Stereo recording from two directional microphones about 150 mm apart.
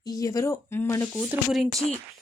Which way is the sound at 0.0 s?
25° left (ahead or behind).